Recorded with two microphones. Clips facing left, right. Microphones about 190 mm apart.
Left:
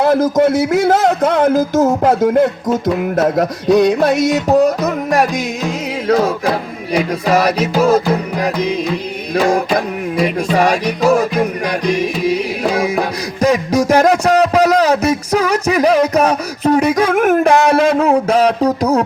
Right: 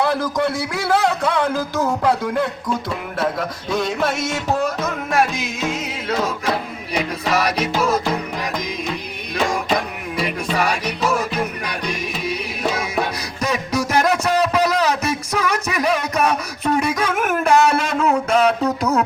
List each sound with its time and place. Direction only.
0.0 s a man's voice: 45° left (ahead or behind)
4.4 s music: 40° left (ahead or behind)
7.8 s music: 35° left (ahead or behind)
13.4 s a sound: 35° left (ahead or behind)